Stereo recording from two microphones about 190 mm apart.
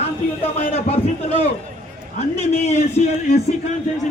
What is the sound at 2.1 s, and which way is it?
A man's voice, 35° left (ahead or behind).